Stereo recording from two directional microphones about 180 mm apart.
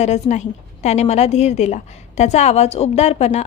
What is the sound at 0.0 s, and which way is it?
A woman's voice, 40° left (ahead or behind).